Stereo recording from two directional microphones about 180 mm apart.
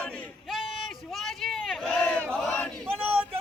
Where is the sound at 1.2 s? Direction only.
Centre (ahead or behind).